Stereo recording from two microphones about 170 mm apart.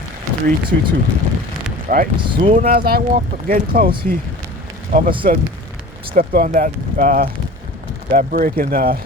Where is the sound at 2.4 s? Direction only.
45° right (ahead or behind).